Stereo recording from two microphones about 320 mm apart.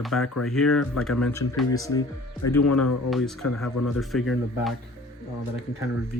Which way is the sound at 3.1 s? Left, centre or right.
Centre.